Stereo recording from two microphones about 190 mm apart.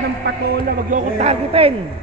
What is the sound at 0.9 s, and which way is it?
Speech, 35° right (ahead or behind).